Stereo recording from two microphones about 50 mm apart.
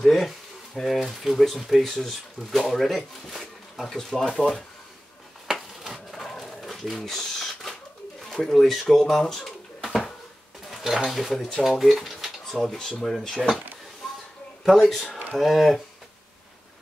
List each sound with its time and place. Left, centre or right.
0.0 s speech: centre
4.4 s speech: centre
5.5 s a sound: centre
6.2 s bird: centre
8.2 s speech: centre
9.4 s pigeon: centre
10.7 s dishes: centre
11.1 s speech: centre
14.0 s a sound: centre
14.6 s speech: centre